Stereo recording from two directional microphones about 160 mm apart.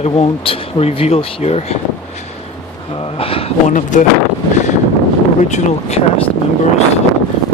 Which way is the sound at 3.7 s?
50° left (ahead or behind).